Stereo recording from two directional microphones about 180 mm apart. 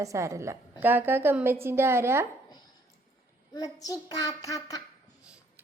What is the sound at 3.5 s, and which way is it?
Child singing, 20° left (ahead or behind).